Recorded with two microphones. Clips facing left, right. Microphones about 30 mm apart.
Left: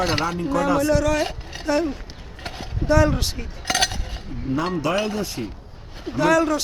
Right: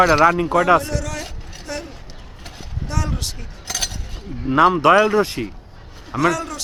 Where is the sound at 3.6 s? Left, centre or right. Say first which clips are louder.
Left 5 dB; left.